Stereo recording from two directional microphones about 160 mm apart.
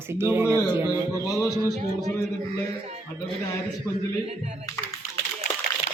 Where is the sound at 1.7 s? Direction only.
45° right (ahead or behind).